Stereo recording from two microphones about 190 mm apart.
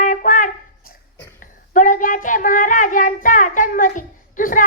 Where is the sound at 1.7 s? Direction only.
45° left (ahead or behind).